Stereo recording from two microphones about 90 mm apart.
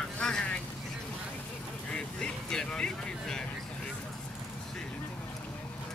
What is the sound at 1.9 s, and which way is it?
Vehicle, 10° left (ahead or behind).